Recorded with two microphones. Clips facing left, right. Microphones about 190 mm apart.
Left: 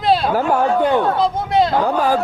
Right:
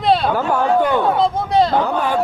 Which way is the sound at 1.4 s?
Centre (ahead or behind).